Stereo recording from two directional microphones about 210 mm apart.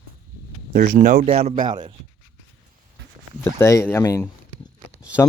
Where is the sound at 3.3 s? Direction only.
10° left (ahead or behind).